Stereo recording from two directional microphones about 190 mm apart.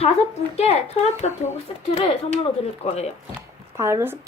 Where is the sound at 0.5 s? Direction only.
30° left (ahead or behind).